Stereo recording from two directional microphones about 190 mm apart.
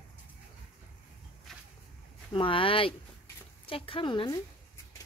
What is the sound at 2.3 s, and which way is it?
Speech, 25° left (ahead or behind).